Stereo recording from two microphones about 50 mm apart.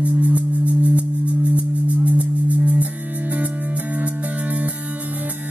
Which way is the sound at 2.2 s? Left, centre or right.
Right.